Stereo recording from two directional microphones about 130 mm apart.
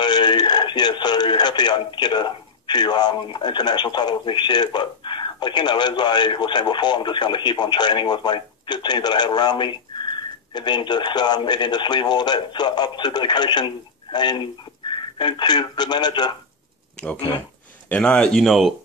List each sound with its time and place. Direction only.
0.0 s speech: 35° left (ahead or behind)
17.8 s speech: 10° left (ahead or behind)